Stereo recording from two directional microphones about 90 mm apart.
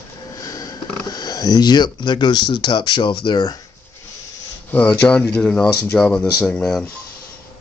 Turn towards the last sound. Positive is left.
turn(degrees=5)  # may be behind; listen again after turning